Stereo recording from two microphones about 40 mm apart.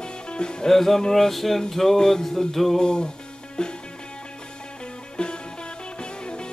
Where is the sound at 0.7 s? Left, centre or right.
Centre.